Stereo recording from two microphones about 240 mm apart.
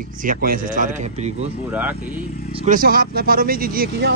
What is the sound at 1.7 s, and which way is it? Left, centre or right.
Speech, centre.